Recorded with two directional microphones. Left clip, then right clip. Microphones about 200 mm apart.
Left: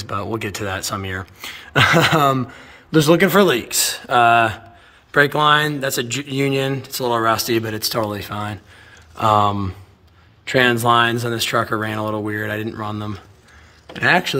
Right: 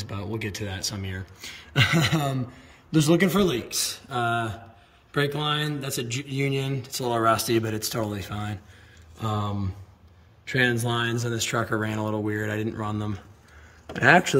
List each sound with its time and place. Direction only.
0.0 s speech: 5° right (ahead or behind)
9.2 s speech: 60° left (ahead or behind)
10.4 s speech: 5° right (ahead or behind)